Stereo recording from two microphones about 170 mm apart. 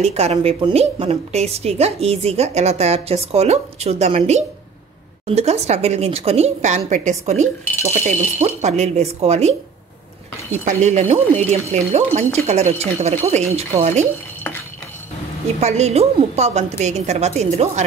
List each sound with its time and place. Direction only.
0.0 s speech: 40° right (ahead or behind)
10.6 s speech: 45° right (ahead or behind)
15.6 s speech: 40° right (ahead or behind)